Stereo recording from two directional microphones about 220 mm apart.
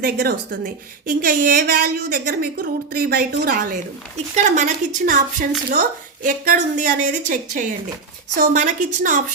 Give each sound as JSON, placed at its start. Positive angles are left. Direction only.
{"t": 0.0, "sound": "a woman's voice", "side_deg": -45}